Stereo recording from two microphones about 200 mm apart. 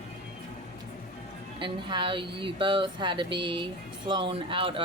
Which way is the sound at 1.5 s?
25° right (ahead or behind).